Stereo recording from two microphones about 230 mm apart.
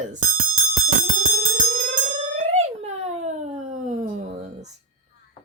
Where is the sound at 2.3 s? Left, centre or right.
Right.